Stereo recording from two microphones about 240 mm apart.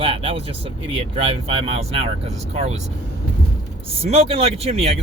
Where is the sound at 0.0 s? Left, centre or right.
Right.